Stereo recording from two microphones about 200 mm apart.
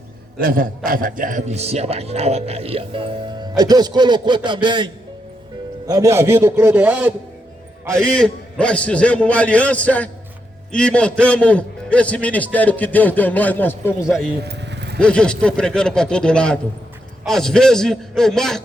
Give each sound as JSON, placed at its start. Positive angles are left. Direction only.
{"t": 0.3, "sound": "a man's voice", "side_deg": -45}
{"t": 5.9, "sound": "a man's voice", "side_deg": -15}
{"t": 7.9, "sound": "a man's voice", "side_deg": 5}
{"t": 14.4, "sound": "vehicle", "side_deg": -60}
{"t": 14.9, "sound": "a man's voice", "side_deg": 5}